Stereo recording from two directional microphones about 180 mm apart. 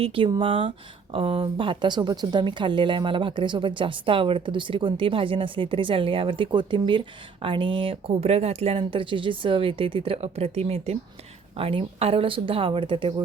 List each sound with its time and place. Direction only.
0.0 s speech: 30° right (ahead or behind)